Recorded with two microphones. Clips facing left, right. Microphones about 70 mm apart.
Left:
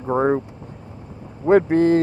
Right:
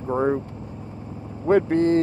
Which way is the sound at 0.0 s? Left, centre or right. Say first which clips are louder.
Left 3 dB; left.